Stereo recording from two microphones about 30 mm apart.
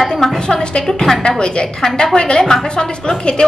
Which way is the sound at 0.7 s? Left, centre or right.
Left.